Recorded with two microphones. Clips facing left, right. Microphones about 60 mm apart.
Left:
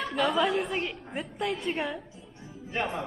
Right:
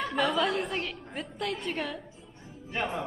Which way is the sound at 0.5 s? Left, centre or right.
Centre.